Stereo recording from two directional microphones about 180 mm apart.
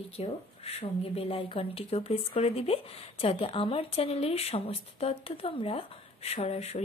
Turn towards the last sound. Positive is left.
turn(degrees=35)  # may be behind; listen again after turning